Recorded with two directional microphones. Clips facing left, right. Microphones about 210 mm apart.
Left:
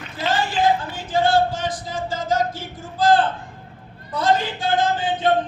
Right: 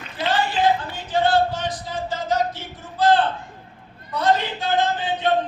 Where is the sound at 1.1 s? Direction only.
45° left (ahead or behind).